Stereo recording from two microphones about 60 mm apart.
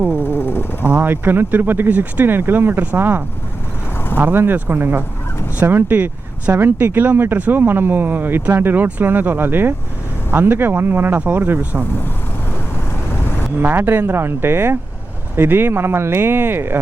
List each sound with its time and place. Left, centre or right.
0.2 s a sound: left
0.9 s speech: right
13.6 s speech: right